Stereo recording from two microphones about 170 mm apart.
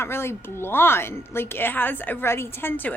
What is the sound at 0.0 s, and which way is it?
A woman's voice, 15° left (ahead or behind).